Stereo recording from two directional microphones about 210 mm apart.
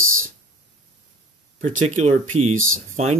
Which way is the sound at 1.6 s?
30° right (ahead or behind).